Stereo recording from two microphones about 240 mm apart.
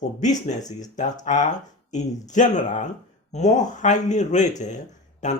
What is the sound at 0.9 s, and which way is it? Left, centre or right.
Speech, left.